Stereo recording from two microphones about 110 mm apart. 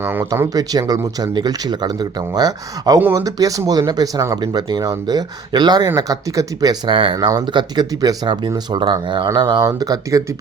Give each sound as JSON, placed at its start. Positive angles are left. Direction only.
{"t": 0.0, "sound": "speech", "side_deg": -20}
{"t": 0.5, "sound": "speech", "side_deg": -35}
{"t": 7.3, "sound": "speech", "side_deg": -40}